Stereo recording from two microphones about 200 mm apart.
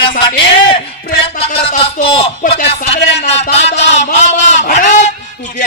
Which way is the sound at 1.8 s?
30° left (ahead or behind).